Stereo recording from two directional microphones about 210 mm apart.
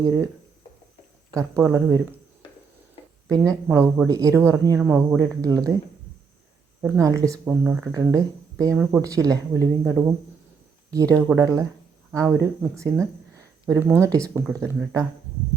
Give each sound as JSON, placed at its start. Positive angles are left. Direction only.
{"t": 1.3, "sound": "speech", "side_deg": -15}
{"t": 3.2, "sound": "speech", "side_deg": -15}
{"t": 6.8, "sound": "speech", "side_deg": -15}
{"t": 10.9, "sound": "speech", "side_deg": -15}